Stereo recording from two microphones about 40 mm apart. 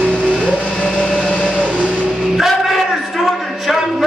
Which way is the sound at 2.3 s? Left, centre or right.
Centre.